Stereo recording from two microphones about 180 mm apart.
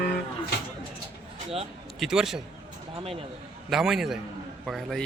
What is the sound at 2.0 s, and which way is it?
Speech, 5° right (ahead or behind).